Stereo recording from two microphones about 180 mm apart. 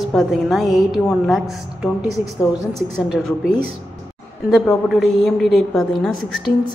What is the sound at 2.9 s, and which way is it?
A woman's voice, 5° right (ahead or behind).